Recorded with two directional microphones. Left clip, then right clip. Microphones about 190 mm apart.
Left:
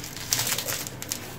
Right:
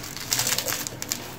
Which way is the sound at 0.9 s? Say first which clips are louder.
Right 3 dB; centre (ahead or behind).